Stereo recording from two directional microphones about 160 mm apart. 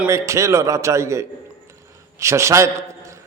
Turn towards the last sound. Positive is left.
turn(degrees=-20)  # may be behind; listen again after turning